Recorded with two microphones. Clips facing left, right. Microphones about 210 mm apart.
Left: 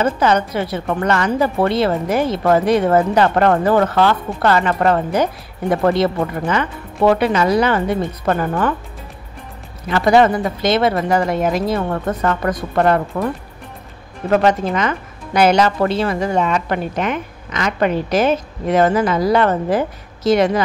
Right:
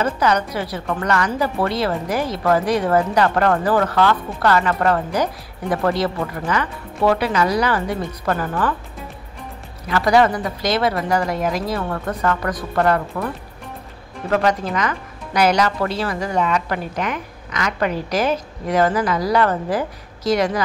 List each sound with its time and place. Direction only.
0.0 s speech: 25° left (ahead or behind)
9.8 s speech: 25° left (ahead or behind)
14.3 s speech: 25° left (ahead or behind)